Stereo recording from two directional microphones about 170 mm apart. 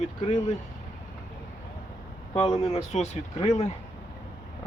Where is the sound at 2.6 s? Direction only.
40° left (ahead or behind).